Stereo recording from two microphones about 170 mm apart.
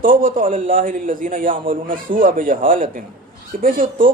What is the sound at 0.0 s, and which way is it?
A man's voice, 55° right (ahead or behind).